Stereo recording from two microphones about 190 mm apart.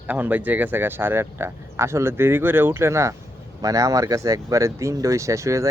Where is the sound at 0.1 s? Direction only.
10° right (ahead or behind).